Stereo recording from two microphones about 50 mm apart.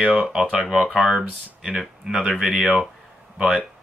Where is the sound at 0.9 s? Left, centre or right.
Centre.